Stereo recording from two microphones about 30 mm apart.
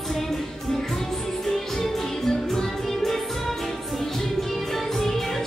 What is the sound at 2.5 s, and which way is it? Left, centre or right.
Music, centre.